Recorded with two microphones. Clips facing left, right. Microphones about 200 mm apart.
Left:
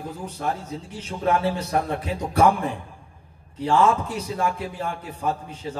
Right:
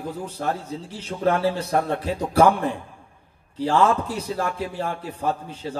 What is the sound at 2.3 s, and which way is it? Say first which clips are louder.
A man's voice: right 2 dB; 35° right (ahead or behind).